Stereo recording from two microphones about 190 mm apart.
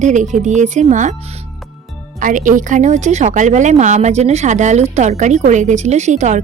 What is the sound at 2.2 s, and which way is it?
A woman's voice, 45° right (ahead or behind).